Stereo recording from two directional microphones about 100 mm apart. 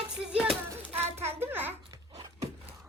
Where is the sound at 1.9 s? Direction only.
40° right (ahead or behind).